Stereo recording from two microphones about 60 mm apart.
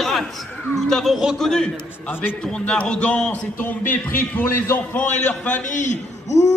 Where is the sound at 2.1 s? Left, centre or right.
Left.